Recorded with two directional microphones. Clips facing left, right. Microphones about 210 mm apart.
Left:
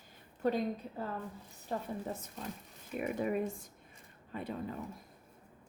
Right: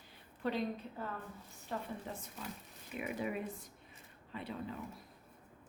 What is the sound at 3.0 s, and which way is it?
A woman's voice, 45° left (ahead or behind).